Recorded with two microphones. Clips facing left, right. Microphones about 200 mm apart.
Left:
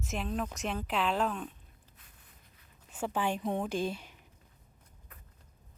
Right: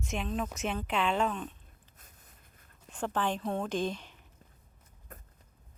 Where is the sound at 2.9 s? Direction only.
10° left (ahead or behind).